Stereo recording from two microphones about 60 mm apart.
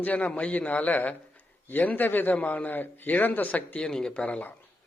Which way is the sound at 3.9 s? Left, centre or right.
Centre.